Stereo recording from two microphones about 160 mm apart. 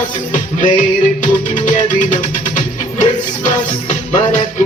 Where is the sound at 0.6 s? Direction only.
50° left (ahead or behind).